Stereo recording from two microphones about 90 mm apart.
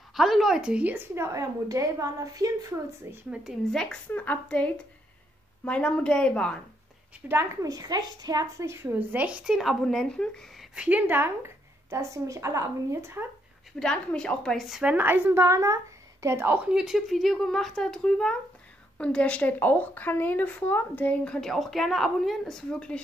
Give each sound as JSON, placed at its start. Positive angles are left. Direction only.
{"t": 0.1, "sound": "speech", "side_deg": 0}
{"t": 1.1, "sound": "a woman's voice", "side_deg": -30}
{"t": 3.1, "sound": "speech", "side_deg": -25}
{"t": 3.7, "sound": "speech", "side_deg": 10}
{"t": 4.1, "sound": "speech", "side_deg": 20}
{"t": 7.2, "sound": "a woman's voice", "side_deg": -15}
{"t": 7.6, "sound": "a woman's voice", "side_deg": -40}
{"t": 8.6, "sound": "speech", "side_deg": -25}
{"t": 9.6, "sound": "speech", "side_deg": 0}
{"t": 10.6, "sound": "speech", "side_deg": -10}
{"t": 13.7, "sound": "speech", "side_deg": 10}
{"t": 14.8, "sound": "speech", "side_deg": -15}
{"t": 15.4, "sound": "a child's voice", "side_deg": -35}
{"t": 16.7, "sound": "speech", "side_deg": -5}